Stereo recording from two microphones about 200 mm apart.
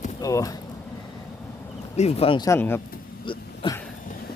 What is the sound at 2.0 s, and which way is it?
Speech, 30° left (ahead or behind).